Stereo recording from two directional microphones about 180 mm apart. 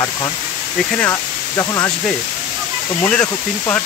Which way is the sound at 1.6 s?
20° left (ahead or behind).